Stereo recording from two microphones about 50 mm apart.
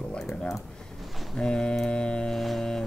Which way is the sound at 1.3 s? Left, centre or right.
Centre.